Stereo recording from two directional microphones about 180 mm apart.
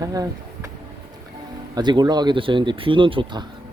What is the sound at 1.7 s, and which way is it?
Speech, 25° right (ahead or behind).